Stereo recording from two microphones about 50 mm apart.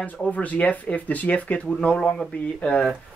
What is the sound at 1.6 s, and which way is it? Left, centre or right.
Speech, centre.